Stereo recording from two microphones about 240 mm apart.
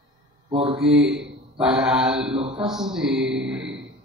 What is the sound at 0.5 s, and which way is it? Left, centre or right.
Speech, right.